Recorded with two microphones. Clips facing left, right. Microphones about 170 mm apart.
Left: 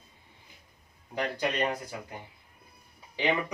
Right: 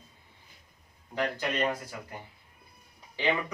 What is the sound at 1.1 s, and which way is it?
Speech, 15° left (ahead or behind).